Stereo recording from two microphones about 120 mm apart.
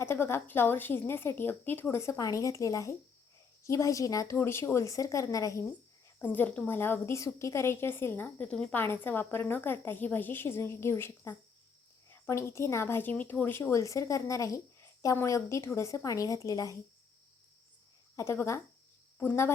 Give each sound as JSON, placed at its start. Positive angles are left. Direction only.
{"t": 0.0, "sound": "a woman's voice", "side_deg": 20}
{"t": 6.1, "sound": "a woman's voice", "side_deg": 15}
{"t": 18.2, "sound": "a woman's voice", "side_deg": 25}